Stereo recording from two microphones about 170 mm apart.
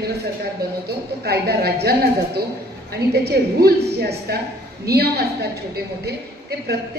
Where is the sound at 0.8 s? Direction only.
70° right (ahead or behind).